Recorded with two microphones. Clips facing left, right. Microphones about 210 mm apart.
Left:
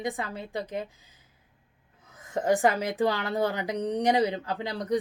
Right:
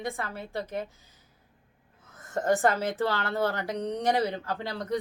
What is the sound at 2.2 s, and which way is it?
A woman's voice, 15° left (ahead or behind).